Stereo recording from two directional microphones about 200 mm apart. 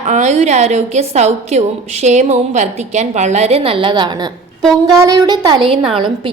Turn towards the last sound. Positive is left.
turn(degrees=0)  # may be behind; listen again after turning